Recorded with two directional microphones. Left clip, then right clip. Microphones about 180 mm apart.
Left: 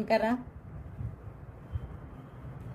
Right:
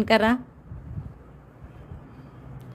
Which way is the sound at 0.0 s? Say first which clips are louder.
Right 7 dB; 45° right (ahead or behind).